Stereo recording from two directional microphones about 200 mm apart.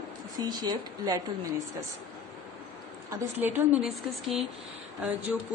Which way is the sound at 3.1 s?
10° right (ahead or behind).